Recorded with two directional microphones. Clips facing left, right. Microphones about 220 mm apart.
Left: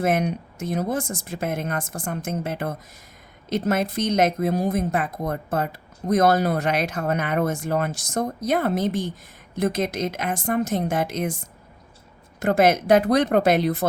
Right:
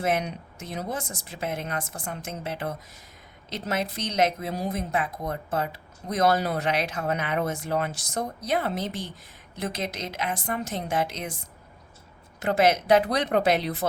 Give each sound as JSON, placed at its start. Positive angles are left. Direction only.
{"t": 0.0, "sound": "speech", "side_deg": 50}
{"t": 12.4, "sound": "speech", "side_deg": 50}